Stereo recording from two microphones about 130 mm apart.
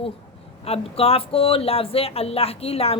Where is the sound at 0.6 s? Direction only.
50° left (ahead or behind).